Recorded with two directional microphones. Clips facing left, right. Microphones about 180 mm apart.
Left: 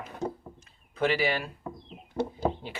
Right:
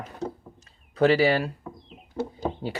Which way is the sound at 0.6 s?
40° right (ahead or behind).